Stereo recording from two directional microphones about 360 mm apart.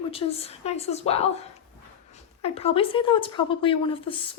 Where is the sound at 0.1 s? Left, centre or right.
Centre.